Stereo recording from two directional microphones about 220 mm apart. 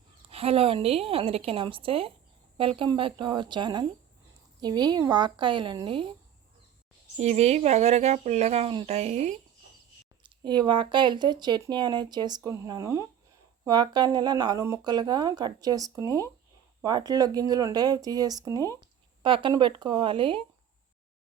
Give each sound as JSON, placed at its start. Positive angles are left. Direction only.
{"t": 0.3, "sound": "speech", "side_deg": -25}
{"t": 7.2, "sound": "speech", "side_deg": -30}
{"t": 10.2, "sound": "speech", "side_deg": -20}